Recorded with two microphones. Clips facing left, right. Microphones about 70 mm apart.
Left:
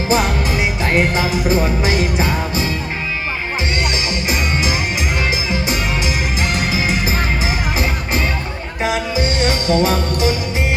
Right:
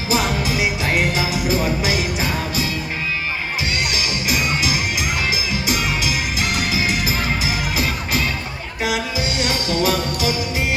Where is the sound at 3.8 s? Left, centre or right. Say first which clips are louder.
Left 2 dB; left.